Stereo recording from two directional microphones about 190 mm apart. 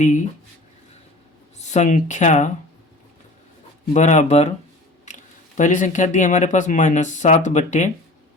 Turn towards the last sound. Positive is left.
turn(degrees=40)  # may be behind; listen again after turning